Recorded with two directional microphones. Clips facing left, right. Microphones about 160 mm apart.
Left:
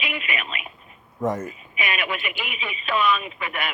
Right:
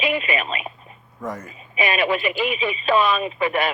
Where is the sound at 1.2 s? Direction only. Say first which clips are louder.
Left 6 dB; 20° left (ahead or behind).